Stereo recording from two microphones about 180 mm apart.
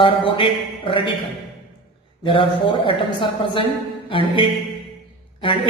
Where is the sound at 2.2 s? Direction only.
30° left (ahead or behind).